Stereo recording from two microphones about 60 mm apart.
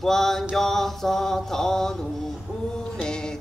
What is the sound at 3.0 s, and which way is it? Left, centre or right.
Mantra, centre.